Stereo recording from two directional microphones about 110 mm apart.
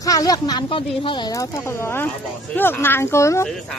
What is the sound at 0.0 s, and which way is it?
Speech, 35° left (ahead or behind).